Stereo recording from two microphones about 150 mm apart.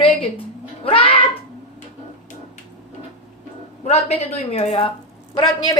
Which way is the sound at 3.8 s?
45° left (ahead or behind).